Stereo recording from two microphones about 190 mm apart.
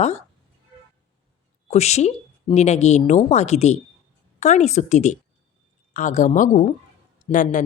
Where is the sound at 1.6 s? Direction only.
35° left (ahead or behind).